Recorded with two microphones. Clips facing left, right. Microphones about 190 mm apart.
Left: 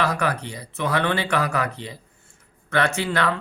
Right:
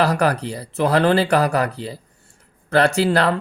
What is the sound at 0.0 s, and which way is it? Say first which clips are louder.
Speech: right 5 dB; 35° right (ahead or behind).